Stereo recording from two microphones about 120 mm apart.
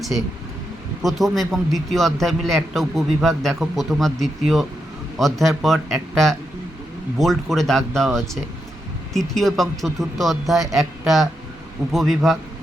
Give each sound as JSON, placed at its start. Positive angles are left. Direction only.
{"t": 1.0, "sound": "a man's voice", "side_deg": 0}